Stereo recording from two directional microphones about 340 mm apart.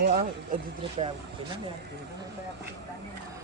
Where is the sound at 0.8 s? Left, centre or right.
Centre.